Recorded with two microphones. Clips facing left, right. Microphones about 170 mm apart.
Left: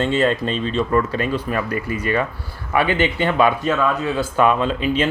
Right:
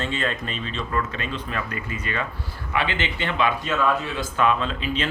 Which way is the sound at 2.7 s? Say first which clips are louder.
Left 8 dB; 45° left (ahead or behind).